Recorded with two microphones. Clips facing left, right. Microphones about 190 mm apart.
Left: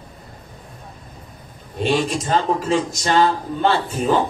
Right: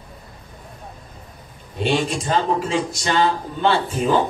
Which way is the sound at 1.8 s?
45° left (ahead or behind).